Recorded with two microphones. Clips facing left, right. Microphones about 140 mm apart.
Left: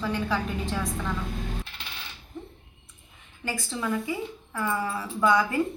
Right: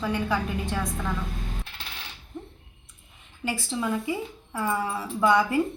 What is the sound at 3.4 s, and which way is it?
A woman's voice, 20° right (ahead or behind).